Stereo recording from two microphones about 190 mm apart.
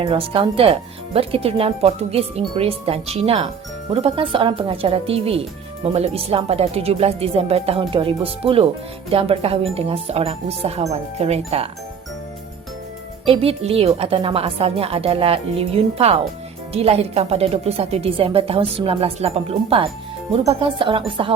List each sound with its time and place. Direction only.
0.0 s speech: 30° right (ahead or behind)
13.2 s speech: 30° right (ahead or behind)